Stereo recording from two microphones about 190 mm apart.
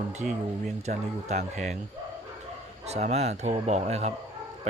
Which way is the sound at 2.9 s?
35° right (ahead or behind).